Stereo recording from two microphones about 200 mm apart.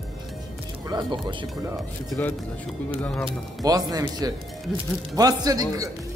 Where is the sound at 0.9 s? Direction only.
25° right (ahead or behind).